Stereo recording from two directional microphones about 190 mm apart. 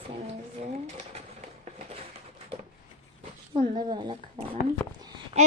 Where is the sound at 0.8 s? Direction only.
35° right (ahead or behind).